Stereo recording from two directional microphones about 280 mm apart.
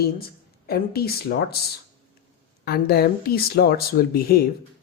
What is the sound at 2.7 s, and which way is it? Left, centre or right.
Speech, left.